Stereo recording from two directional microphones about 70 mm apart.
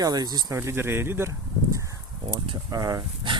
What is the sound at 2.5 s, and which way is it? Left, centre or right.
Speech, right.